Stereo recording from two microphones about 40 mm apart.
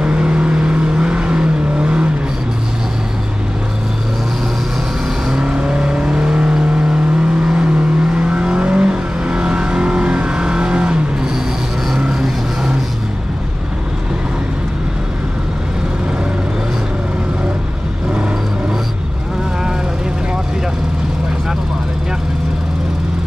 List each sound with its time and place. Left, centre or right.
0.0 s vehicle: right
5.3 s vehicle: right